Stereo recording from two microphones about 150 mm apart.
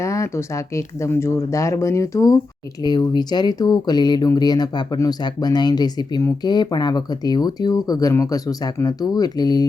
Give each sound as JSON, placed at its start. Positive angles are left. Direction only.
{"t": 0.0, "sound": "speech", "side_deg": 20}